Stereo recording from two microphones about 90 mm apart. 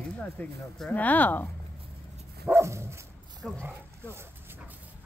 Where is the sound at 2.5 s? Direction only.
30° right (ahead or behind).